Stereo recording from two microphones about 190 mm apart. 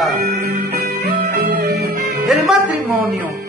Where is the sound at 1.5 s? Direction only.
45° right (ahead or behind).